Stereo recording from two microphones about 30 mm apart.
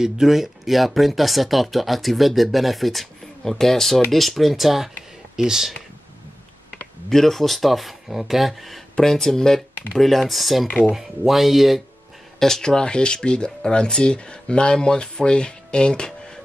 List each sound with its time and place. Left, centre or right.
0.0 s speech: centre
3.4 s speech: centre
5.3 s speech: centre
7.1 s speech: centre
9.0 s speech: centre
12.4 s speech: centre